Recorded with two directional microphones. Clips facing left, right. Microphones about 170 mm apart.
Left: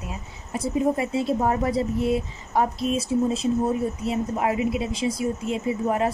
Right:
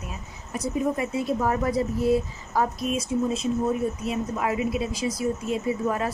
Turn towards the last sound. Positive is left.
turn(degrees=25)  # may be behind; listen again after turning